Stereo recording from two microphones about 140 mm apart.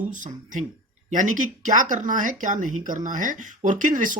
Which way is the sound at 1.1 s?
65° right (ahead or behind).